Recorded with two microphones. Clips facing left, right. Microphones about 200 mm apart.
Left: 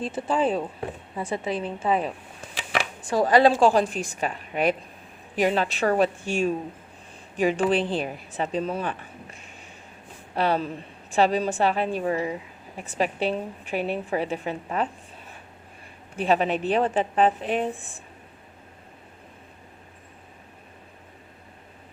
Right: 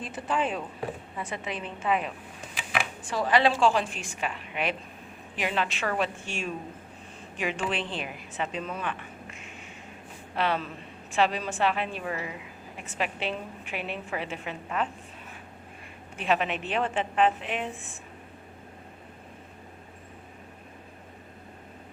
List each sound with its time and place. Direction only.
0.0 s a woman's voice: 30° left (ahead or behind)
16.1 s a woman's voice: 35° left (ahead or behind)